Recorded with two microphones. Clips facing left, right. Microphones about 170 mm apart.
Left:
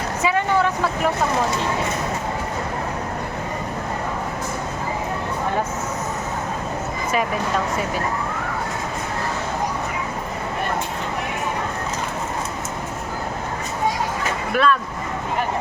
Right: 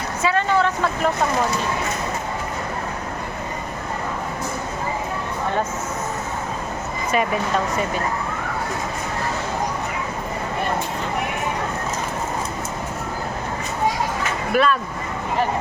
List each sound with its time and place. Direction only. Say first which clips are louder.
0.2 s speech: even; 15° left (ahead or behind)
14.5 s speech: even; 5° right (ahead or behind)